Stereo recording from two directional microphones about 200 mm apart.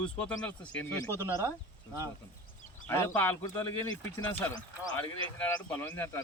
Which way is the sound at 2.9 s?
10° left (ahead or behind).